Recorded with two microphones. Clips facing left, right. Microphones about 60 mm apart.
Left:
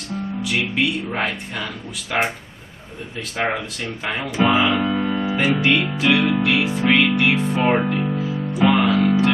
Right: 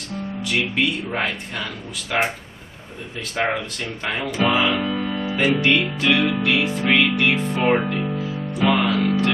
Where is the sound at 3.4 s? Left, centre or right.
Centre.